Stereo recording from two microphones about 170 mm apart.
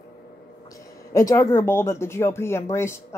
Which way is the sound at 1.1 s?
15° left (ahead or behind).